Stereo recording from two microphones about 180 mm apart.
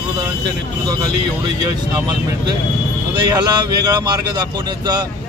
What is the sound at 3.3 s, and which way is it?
Speech, 20° right (ahead or behind).